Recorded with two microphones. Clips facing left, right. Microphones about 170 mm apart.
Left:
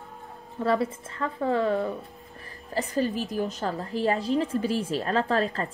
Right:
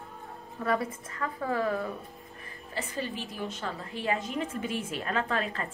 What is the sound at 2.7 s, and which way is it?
A woman's voice, 40° left (ahead or behind).